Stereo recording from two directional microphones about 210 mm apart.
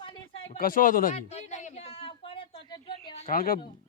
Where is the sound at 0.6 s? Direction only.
40° left (ahead or behind).